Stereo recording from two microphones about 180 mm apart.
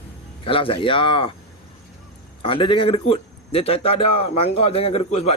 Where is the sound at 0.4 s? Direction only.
30° left (ahead or behind).